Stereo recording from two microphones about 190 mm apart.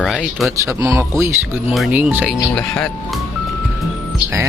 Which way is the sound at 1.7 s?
5° right (ahead or behind).